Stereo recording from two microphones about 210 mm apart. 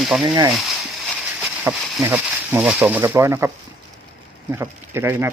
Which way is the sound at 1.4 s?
5° right (ahead or behind).